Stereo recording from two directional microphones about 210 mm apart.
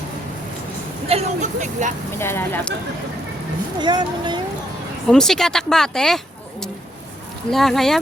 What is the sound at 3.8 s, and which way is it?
Speech, 20° right (ahead or behind).